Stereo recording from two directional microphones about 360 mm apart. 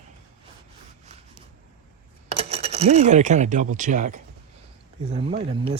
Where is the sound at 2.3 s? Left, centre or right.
Centre.